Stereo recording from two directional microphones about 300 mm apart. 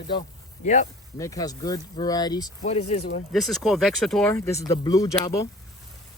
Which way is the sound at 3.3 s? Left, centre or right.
Centre.